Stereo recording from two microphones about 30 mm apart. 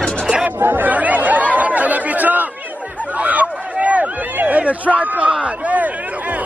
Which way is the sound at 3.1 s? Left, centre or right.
Right.